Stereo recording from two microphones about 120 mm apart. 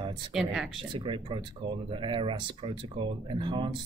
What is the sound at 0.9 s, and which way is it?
Speech, 45° right (ahead or behind).